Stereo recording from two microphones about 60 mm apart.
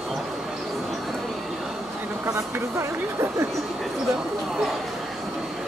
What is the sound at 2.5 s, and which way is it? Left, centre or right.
Speech, right.